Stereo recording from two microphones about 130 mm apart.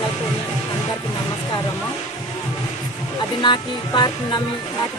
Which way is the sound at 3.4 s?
35° left (ahead or behind).